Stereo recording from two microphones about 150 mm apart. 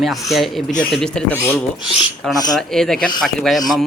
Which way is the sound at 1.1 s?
15° left (ahead or behind).